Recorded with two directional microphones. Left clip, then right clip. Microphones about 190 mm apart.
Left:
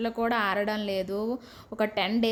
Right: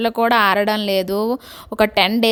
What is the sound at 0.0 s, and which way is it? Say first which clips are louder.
A woman's voice: right 12 dB; 50° right (ahead or behind).